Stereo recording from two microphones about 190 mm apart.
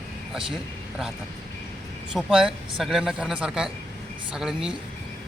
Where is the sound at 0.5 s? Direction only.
Centre (ahead or behind).